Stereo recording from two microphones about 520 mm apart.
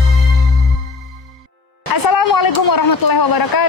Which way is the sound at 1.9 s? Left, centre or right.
Left.